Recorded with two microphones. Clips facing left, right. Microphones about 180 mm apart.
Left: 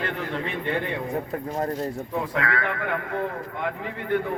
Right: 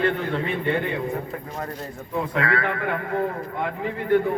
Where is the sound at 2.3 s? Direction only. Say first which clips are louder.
Right 5 dB; 30° right (ahead or behind).